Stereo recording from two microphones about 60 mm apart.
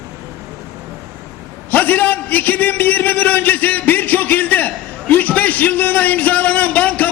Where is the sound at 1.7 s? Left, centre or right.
Left.